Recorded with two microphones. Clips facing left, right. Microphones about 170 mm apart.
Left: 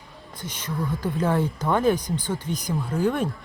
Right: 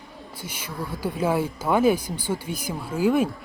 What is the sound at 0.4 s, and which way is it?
Speech, 10° right (ahead or behind).